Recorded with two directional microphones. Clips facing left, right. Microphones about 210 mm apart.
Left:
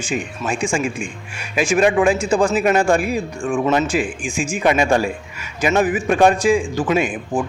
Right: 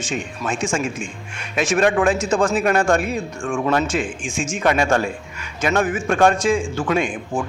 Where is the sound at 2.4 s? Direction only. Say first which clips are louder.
Left 2 dB; centre (ahead or behind).